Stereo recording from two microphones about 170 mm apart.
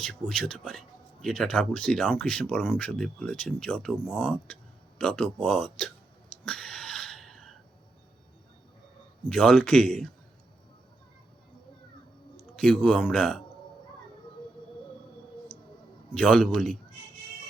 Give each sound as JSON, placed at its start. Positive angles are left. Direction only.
{"t": 0.0, "sound": "speech", "side_deg": 5}
{"t": 6.4, "sound": "a sound", "side_deg": 5}
{"t": 9.2, "sound": "speech", "side_deg": 5}
{"t": 12.5, "sound": "speech", "side_deg": 5}
{"t": 15.5, "sound": "music", "side_deg": 30}
{"t": 16.1, "sound": "speech", "side_deg": 5}